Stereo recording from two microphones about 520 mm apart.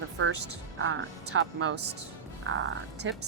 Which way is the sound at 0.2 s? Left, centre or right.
Right.